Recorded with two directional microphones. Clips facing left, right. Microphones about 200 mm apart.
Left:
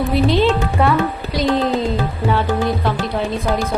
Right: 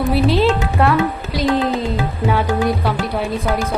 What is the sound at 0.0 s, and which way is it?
A woman's voice, 5° right (ahead or behind).